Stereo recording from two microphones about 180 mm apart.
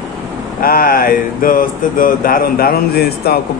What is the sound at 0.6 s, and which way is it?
Speech, 55° left (ahead or behind).